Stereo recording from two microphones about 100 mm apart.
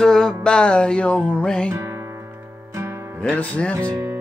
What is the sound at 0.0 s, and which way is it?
Music, 5° left (ahead or behind).